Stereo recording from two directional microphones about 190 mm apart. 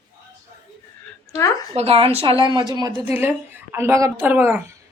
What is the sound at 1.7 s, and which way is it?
Speech, 30° right (ahead or behind).